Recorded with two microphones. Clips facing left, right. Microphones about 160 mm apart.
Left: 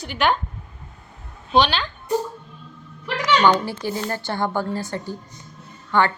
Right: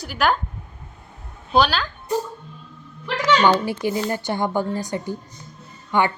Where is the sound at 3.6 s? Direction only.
15° right (ahead or behind).